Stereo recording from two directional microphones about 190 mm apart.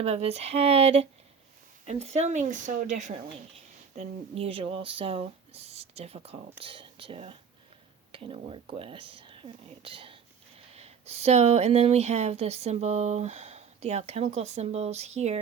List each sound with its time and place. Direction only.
0.0 s speech: 35° right (ahead or behind)